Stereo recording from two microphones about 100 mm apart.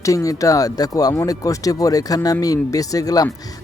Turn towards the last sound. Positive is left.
turn(degrees=35)  # may be behind; listen again after turning